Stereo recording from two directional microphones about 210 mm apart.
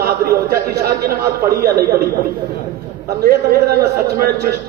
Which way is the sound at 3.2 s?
50° right (ahead or behind).